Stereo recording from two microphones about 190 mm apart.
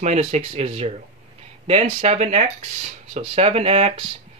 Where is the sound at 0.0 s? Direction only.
35° right (ahead or behind).